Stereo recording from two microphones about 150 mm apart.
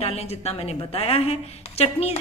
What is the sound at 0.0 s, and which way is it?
A woman's voice, 45° left (ahead or behind).